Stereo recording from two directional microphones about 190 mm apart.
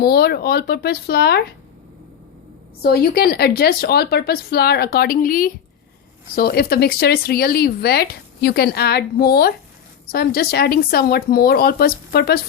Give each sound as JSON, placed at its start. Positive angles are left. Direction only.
{"t": 0.0, "sound": "speech", "side_deg": 55}
{"t": 2.8, "sound": "speech", "side_deg": 55}